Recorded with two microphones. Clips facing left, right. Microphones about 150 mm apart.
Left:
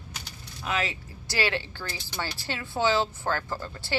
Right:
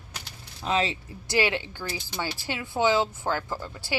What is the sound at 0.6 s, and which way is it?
Speech, 25° right (ahead or behind).